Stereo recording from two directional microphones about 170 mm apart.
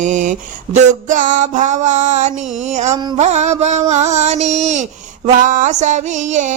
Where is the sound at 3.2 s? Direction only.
40° right (ahead or behind).